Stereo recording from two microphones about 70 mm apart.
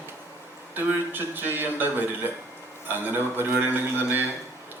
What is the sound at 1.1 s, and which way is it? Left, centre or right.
Speech, right.